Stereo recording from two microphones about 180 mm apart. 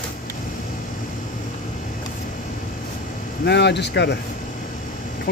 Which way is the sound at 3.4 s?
70° left (ahead or behind).